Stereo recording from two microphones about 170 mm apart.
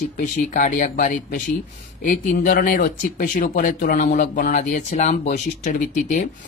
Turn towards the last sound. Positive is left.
turn(degrees=45)  # may be behind; listen again after turning